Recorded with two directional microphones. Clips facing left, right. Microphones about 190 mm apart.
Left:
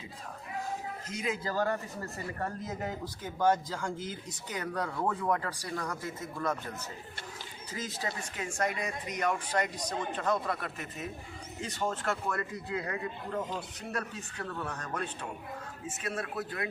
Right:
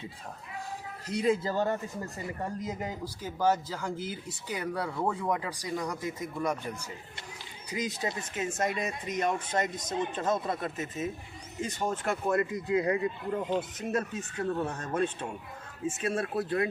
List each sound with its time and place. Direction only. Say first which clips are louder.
1.0 s speech: right 9 dB; 35° right (ahead or behind)